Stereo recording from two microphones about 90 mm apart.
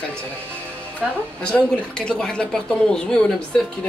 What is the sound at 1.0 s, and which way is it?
Speech, 5° right (ahead or behind).